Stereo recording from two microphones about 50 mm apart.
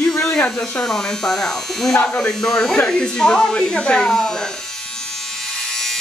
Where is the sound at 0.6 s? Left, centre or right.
Centre.